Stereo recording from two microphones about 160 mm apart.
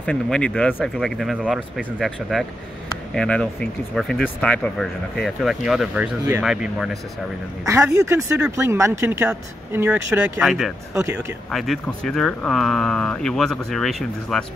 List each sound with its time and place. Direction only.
0.0 s speech: 5° left (ahead or behind)
7.6 s a woman's voice: 20° right (ahead or behind); by 14.4 s centre (ahead or behind)